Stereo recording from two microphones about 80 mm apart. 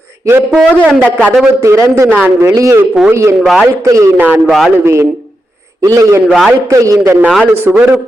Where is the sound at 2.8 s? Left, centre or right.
Centre.